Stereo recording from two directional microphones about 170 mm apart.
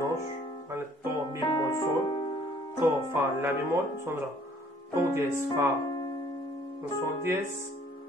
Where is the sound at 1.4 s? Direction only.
25° left (ahead or behind).